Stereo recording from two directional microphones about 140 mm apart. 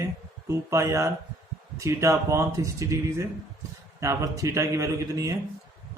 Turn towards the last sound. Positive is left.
turn(degrees=-20)  # may be behind; listen again after turning